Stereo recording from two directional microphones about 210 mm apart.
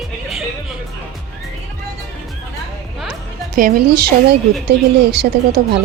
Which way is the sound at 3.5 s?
45° right (ahead or behind).